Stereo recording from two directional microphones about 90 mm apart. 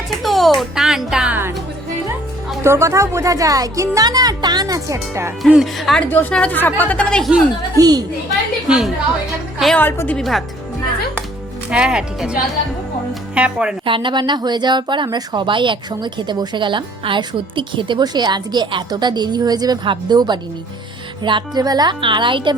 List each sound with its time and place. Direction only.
0.2 s speech: centre (ahead or behind)
2.6 s speech: 30° right (ahead or behind)
5.7 s a woman's voice: centre (ahead or behind)
6.0 s a woman's voice: 20° left (ahead or behind)
7.8 s speech: 45° right (ahead or behind)
8.6 s a woman's voice: 5° right (ahead or behind)
9.7 s a woman's voice: 20° left (ahead or behind)
10.2 s a woman's voice: centre (ahead or behind)
11.7 s speech: 10° right (ahead or behind)
13.8 s speech: 65° right (ahead or behind); by 19.8 s 45° right (ahead or behind)
19.8 s speech: 60° right (ahead or behind)
21.6 s speech: 45° right (ahead or behind)
22.0 s speech: 65° right (ahead or behind)